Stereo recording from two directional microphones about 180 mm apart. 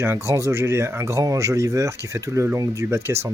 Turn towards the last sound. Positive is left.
turn(degrees=-15)  # may be behind; listen again after turning